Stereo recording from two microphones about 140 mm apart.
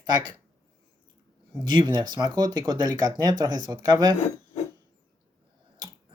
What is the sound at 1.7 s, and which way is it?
Speech, 30° right (ahead or behind).